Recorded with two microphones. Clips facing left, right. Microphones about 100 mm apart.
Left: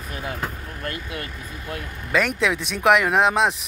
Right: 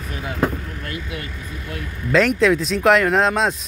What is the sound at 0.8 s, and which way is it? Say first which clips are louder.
Vehicle: right 1 dB; 45° left (ahead or behind).